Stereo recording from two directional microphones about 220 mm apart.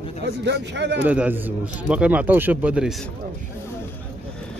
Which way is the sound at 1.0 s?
5° right (ahead or behind).